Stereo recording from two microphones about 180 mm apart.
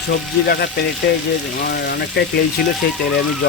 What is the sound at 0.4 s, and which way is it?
Cutlery, 65° left (ahead or behind).